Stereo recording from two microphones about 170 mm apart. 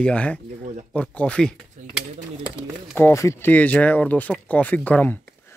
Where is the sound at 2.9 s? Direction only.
15° left (ahead or behind).